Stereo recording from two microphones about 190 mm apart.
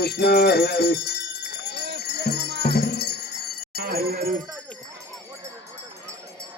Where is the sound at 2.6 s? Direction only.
60° left (ahead or behind).